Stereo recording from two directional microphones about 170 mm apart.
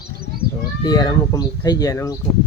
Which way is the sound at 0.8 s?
25° left (ahead or behind).